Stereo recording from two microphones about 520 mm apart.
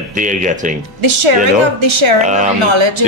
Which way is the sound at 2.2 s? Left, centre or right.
Centre.